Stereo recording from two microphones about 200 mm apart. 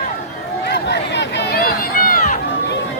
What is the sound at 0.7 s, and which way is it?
Run, 55° left (ahead or behind).